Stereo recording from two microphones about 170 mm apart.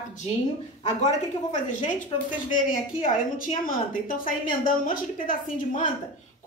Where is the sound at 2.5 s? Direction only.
50° left (ahead or behind).